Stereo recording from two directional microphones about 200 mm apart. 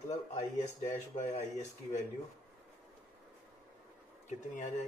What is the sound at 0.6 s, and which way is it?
Speech, 35° left (ahead or behind).